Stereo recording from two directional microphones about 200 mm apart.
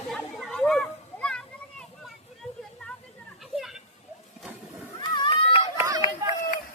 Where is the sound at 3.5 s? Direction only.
Centre (ahead or behind).